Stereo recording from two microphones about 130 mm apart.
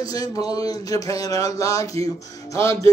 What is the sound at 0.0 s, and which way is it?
A man's voice, 25° left (ahead or behind).